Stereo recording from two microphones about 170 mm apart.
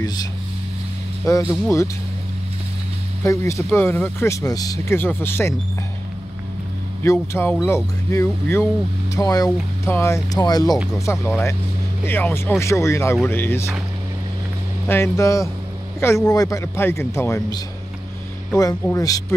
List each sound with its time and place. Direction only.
1.5 s speech: 15° left (ahead or behind)
3.3 s speech: 15° left (ahead or behind)
7.0 s speech: 15° left (ahead or behind)
14.9 s speech: 15° left (ahead or behind)
18.6 s speech: 20° left (ahead or behind)